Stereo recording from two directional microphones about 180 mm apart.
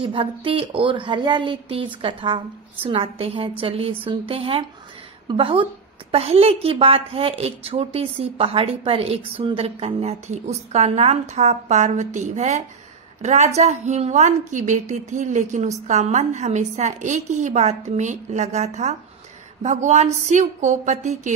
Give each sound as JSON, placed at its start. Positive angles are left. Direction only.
{"t": 0.0, "sound": "a woman's voice", "side_deg": -30}